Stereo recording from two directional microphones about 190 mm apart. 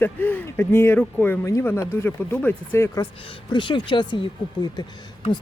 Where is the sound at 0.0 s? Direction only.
10° left (ahead or behind).